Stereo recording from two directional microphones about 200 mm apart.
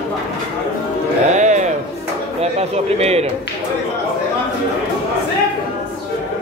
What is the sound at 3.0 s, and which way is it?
Speech, 30° right (ahead or behind).